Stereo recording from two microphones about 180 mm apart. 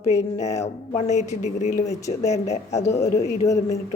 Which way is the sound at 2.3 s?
40° left (ahead or behind).